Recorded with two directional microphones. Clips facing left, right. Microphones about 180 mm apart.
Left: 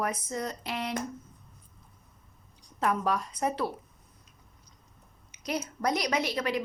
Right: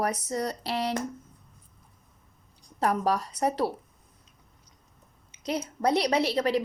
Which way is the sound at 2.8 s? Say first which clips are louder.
Right 2 dB; 35° right (ahead or behind).